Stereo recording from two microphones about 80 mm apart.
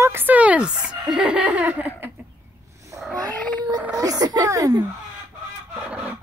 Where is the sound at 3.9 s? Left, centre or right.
Right.